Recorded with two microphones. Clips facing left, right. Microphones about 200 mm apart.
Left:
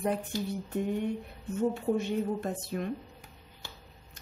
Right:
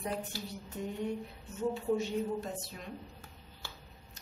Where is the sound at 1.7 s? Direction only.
55° left (ahead or behind).